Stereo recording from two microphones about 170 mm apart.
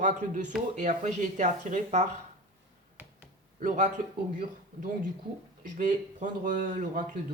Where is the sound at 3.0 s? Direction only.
10° right (ahead or behind).